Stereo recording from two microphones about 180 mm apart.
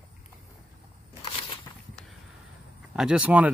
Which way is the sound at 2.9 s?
5° right (ahead or behind).